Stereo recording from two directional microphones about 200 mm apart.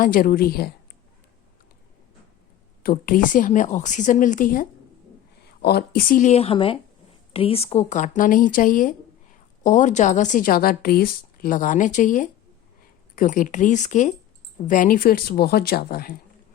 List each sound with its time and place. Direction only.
0.0 s speech: 45° left (ahead or behind)
2.8 s a woman's voice: 45° left (ahead or behind)